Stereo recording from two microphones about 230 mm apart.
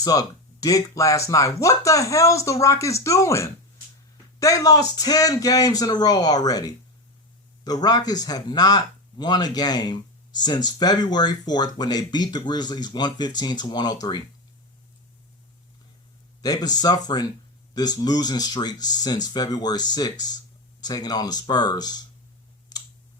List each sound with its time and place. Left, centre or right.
0.0 s speech: centre
16.4 s speech: centre
22.7 s a sound: centre